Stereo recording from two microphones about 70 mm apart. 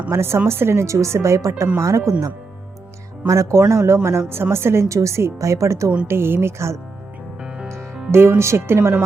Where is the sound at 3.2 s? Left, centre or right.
Right.